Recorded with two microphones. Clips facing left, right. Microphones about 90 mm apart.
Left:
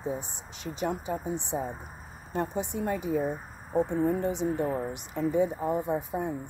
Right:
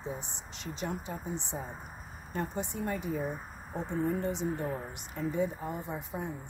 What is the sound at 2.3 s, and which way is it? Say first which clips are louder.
A woman's voice: left 5 dB; 65° left (ahead or behind).